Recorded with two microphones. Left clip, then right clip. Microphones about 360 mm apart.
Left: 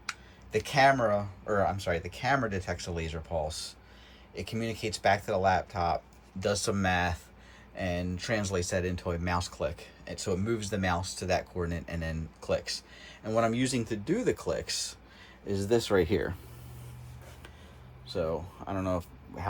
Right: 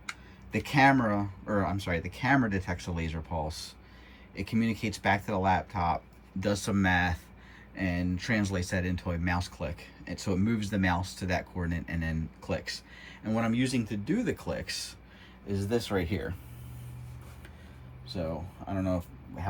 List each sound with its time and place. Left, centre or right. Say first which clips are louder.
0.5 s speech: even; centre
4.4 s speech: right 3 dB; centre
15.4 s speech: left 4 dB; left
18.1 s speech: left 4 dB; centre